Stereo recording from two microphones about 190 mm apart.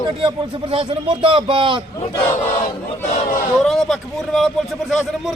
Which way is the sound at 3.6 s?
Centre (ahead or behind).